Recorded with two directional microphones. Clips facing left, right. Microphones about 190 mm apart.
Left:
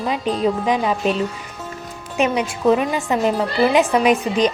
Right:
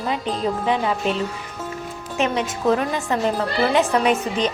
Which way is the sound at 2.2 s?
15° left (ahead or behind).